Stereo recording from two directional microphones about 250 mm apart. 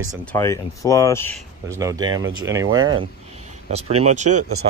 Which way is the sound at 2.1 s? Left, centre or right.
Right.